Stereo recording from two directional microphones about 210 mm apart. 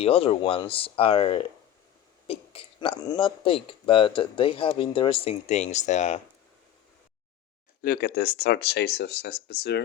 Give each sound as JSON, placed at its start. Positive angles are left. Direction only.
{"t": 0.0, "sound": "speech", "side_deg": 25}
{"t": 7.8, "sound": "speech", "side_deg": 45}